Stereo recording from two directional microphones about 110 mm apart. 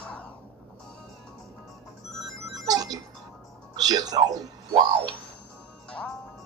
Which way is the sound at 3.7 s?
35° right (ahead or behind).